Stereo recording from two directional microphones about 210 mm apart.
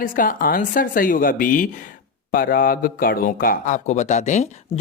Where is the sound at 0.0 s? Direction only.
40° left (ahead or behind).